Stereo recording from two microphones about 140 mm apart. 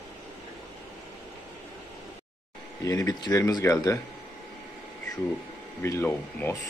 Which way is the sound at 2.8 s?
25° left (ahead or behind).